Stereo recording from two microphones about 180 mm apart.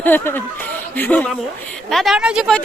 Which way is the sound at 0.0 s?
10° left (ahead or behind).